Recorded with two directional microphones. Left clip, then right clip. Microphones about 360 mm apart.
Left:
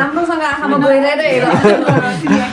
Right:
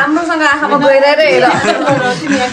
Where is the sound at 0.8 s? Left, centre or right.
Right.